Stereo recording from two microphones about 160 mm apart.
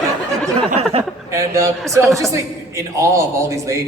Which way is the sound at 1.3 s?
20° right (ahead or behind).